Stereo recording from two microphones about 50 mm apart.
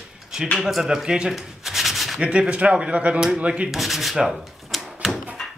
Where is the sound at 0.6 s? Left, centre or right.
Centre.